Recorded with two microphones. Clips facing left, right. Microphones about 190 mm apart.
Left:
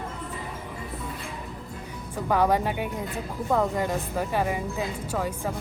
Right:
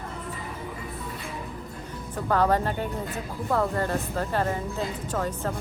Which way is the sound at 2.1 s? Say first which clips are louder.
Even; 10° left (ahead or behind).